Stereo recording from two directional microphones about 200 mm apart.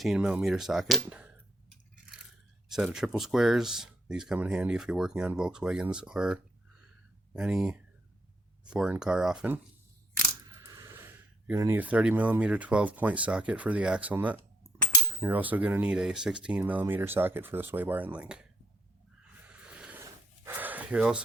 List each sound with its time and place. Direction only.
0.0 s speech: 5° right (ahead or behind)
2.6 s speech: centre (ahead or behind)
10.4 s coin: 15° right (ahead or behind)
11.4 s speech: 15° right (ahead or behind)
19.5 s gasp: 5° right (ahead or behind)